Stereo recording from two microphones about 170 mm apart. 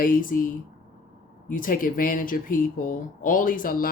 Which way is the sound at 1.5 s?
55° left (ahead or behind).